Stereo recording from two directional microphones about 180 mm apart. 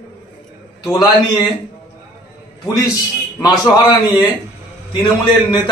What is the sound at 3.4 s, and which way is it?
A man's voice, 20° left (ahead or behind).